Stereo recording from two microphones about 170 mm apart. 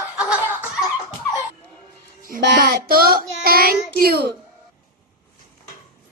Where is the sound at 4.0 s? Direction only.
65° right (ahead or behind).